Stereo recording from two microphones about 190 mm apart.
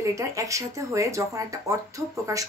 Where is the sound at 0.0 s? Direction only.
15° right (ahead or behind).